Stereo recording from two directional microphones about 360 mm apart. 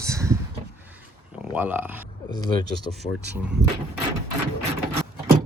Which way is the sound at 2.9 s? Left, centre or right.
Centre.